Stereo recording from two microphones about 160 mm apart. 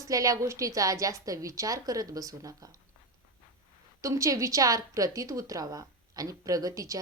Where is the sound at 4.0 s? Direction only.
20° right (ahead or behind).